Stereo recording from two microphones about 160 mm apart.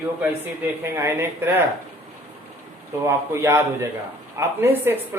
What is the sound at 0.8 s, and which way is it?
Speech, 15° right (ahead or behind).